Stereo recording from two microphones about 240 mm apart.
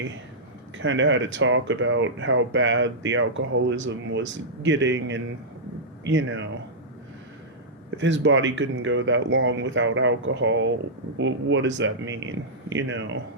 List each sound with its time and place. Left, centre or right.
0.8 s speech: right
7.9 s speech: right